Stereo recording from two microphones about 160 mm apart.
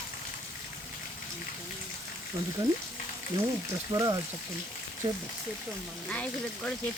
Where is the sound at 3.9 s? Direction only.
20° right (ahead or behind).